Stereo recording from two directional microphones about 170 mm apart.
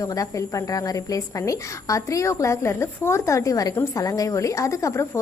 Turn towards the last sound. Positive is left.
turn(degrees=15)  # may be behind; listen again after turning